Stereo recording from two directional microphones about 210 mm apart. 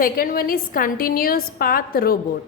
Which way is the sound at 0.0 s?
45° left (ahead or behind).